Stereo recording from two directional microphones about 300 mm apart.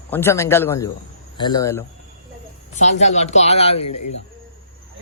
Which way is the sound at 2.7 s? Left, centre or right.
Left.